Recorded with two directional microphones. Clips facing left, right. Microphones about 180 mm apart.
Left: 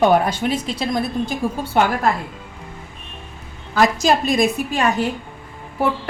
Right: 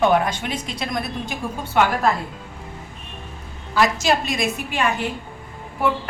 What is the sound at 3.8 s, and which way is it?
A woman's voice, 35° left (ahead or behind).